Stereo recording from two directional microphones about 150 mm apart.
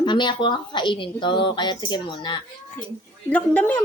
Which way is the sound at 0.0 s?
30° left (ahead or behind).